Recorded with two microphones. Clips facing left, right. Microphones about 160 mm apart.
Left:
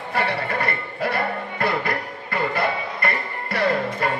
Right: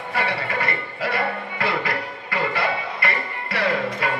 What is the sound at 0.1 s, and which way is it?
Music, 55° left (ahead or behind).